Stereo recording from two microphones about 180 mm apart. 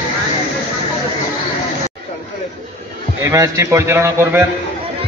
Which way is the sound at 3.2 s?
15° right (ahead or behind).